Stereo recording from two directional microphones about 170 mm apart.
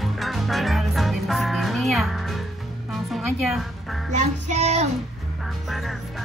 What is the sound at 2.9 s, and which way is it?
A woman's voice, centre (ahead or behind).